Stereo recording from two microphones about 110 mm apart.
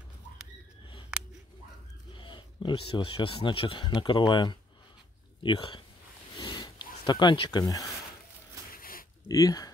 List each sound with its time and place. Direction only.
1.1 s scissors: 10° right (ahead or behind)
2.1 s speech: 50° left (ahead or behind)
6.3 s a sound: 40° left (ahead or behind)
7.6 s speech: 30° left (ahead or behind)
9.3 s speech: 35° left (ahead or behind)